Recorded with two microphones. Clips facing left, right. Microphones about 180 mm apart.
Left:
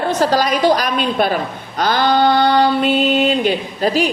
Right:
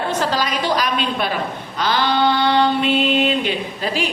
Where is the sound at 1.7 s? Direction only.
45° left (ahead or behind).